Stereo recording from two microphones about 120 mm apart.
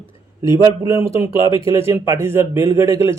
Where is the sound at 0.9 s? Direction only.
20° right (ahead or behind).